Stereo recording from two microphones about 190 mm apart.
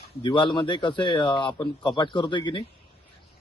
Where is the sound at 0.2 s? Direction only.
25° left (ahead or behind).